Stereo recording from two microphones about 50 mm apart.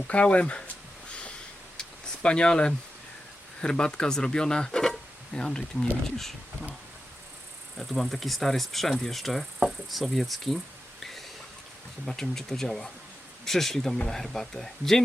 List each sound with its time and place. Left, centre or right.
0.1 s speech: left
1.7 s a sound: centre
3.6 s speech: centre
4.8 s a sound: centre
5.4 s speech: centre
7.8 s speech: centre
12.0 s speech: centre